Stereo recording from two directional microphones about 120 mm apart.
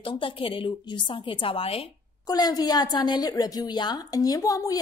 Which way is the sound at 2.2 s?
35° left (ahead or behind).